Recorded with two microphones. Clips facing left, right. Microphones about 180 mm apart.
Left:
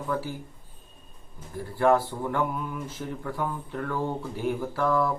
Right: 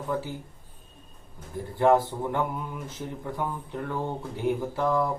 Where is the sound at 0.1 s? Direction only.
20° right (ahead or behind).